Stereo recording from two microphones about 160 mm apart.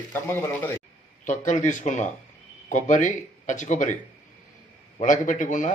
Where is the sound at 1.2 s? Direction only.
50° left (ahead or behind).